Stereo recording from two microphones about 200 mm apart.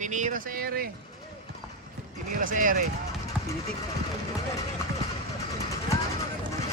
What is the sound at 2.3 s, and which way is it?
Speech, 40° right (ahead or behind).